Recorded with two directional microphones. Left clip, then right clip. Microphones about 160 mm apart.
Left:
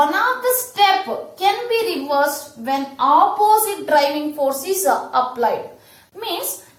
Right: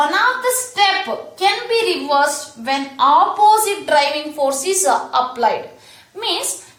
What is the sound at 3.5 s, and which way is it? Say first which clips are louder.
A woman's voice: right 1 dB; 20° right (ahead or behind).